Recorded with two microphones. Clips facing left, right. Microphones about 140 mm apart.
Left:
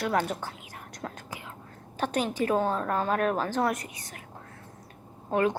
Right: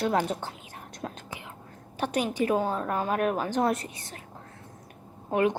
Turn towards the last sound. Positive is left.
turn(degrees=-15)  # may be behind; listen again after turning